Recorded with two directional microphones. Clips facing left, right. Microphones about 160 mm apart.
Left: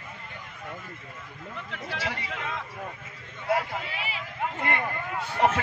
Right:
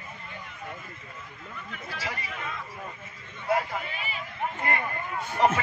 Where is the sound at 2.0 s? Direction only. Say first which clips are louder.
Even; 85° left.